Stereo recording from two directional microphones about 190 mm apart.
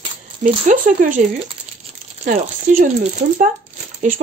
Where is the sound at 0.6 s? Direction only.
45° right (ahead or behind).